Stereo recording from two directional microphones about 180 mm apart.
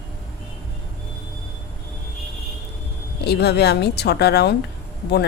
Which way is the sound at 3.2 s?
65° left (ahead or behind).